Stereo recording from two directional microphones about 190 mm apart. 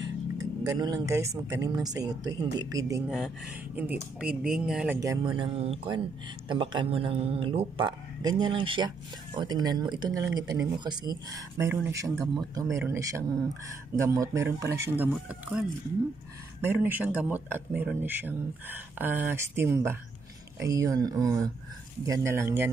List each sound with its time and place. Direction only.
0.7 s speech: 20° right (ahead or behind)
3.1 s speech: 5° right (ahead or behind)
16.6 s speech: 10° right (ahead or behind)